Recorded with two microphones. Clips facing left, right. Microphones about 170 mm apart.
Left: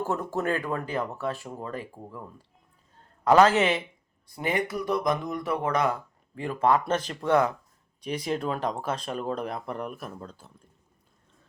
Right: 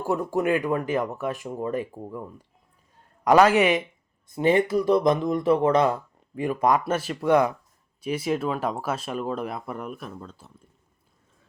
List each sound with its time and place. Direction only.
0.0 s speech: 10° right (ahead or behind)
6.3 s speech: 15° right (ahead or behind)